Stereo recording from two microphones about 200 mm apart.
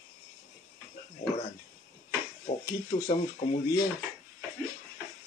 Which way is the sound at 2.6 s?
20° left (ahead or behind).